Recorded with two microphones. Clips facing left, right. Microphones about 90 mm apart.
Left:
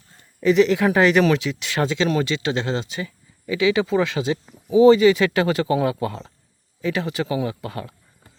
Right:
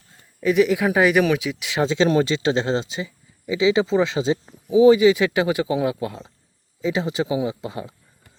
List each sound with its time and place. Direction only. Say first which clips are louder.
0.4 s speech: left 2 dB; 5° right (ahead or behind)
1.9 s speech: right 5 dB; 30° right (ahead or behind)
4.7 s speech: even; 10° right (ahead or behind)
6.8 s speech: right 1 dB; 20° right (ahead or behind)